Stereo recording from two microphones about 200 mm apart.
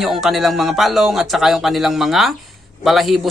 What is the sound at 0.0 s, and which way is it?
A man's voice, centre (ahead or behind).